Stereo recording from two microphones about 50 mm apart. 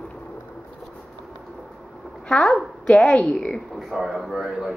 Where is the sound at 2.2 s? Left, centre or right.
Centre.